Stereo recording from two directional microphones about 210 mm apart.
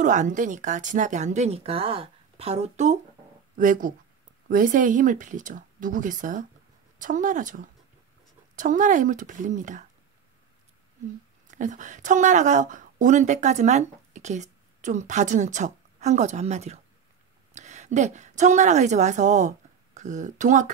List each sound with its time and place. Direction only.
0.0 s speech: 35° right (ahead or behind)
11.5 s a woman's voice: 35° right (ahead or behind)